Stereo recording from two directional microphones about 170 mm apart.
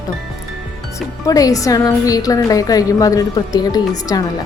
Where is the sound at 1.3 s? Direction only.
20° left (ahead or behind).